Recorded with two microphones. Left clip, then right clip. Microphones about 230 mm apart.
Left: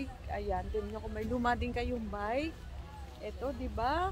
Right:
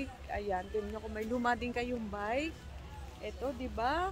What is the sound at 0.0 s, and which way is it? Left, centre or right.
Speech, centre.